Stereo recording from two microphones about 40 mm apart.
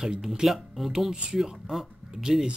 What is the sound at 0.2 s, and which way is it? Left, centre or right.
Speech, centre.